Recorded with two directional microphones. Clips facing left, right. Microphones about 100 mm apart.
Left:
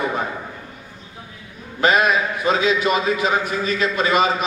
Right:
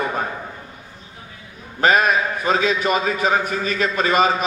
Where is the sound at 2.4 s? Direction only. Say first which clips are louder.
Left 2 dB; 40° right (ahead or behind).